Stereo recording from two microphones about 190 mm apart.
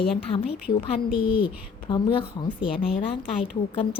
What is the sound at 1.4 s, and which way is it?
A woman's voice, 25° left (ahead or behind).